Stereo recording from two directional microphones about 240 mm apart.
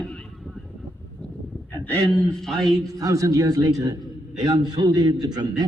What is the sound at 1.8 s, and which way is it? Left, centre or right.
A man's voice, centre.